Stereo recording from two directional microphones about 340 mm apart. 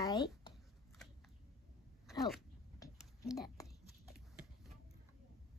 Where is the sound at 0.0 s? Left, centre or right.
Centre.